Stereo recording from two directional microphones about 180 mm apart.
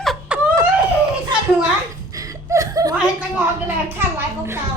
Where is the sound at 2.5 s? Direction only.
20° right (ahead or behind).